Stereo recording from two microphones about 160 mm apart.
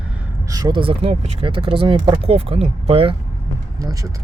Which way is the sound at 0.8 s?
35° right (ahead or behind).